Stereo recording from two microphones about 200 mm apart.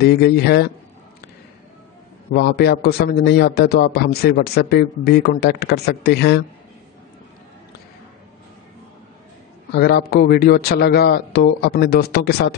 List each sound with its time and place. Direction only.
0.0 s speech: 55° left (ahead or behind)
2.3 s a man's voice: 55° left (ahead or behind)
9.7 s a man's voice: 55° left (ahead or behind)